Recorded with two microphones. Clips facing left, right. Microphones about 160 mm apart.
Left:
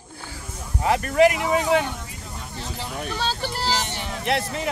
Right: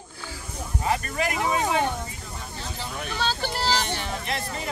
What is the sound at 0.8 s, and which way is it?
Speech, 75° left (ahead or behind).